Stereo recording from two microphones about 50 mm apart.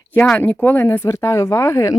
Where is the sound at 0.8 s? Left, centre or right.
Left.